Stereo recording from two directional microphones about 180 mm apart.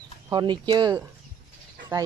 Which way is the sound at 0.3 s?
25° right (ahead or behind).